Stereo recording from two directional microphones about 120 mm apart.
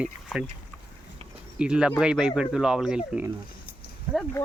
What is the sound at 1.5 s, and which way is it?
Speech, 10° right (ahead or behind).